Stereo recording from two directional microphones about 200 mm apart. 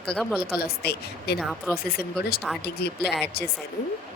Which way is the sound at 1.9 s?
50° left (ahead or behind).